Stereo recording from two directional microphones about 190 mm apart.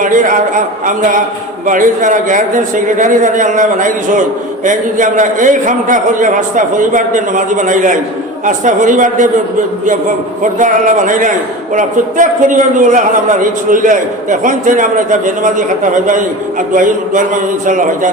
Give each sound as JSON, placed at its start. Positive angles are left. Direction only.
{"t": 0.0, "sound": "a man's voice", "side_deg": -45}
{"t": 10.6, "sound": "a man's voice", "side_deg": -45}
{"t": 16.0, "sound": "a man's voice", "side_deg": -45}